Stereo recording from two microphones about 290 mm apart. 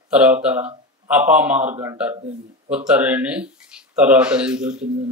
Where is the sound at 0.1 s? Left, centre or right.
Centre.